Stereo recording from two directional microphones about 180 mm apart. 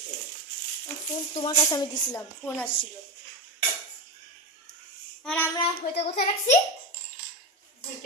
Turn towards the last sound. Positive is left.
turn(degrees=35)  # may be behind; listen again after turning